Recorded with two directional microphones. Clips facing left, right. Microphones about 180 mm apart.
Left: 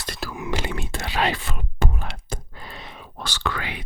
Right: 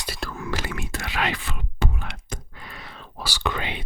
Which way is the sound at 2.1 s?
35° left (ahead or behind).